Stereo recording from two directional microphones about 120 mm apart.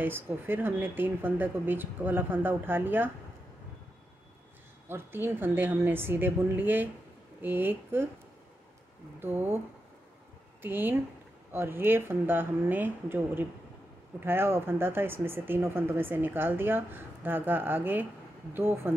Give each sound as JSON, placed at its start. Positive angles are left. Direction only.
{"t": 0.0, "sound": "speech", "side_deg": -15}
{"t": 4.8, "sound": "speech", "side_deg": -20}
{"t": 9.2, "sound": "speech", "side_deg": -20}
{"t": 10.6, "sound": "speech", "side_deg": -15}